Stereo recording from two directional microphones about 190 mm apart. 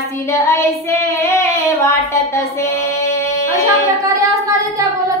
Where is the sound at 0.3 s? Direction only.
15° left (ahead or behind).